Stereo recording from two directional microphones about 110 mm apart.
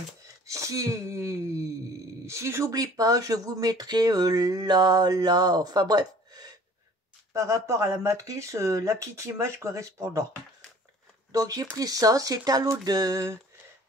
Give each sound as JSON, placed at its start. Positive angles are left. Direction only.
{"t": 0.5, "sound": "speech", "side_deg": -30}
{"t": 11.3, "sound": "speech", "side_deg": -30}